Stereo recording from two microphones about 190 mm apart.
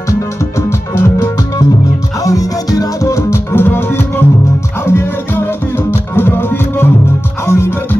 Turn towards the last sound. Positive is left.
turn(degrees=10)  # may be behind; listen again after turning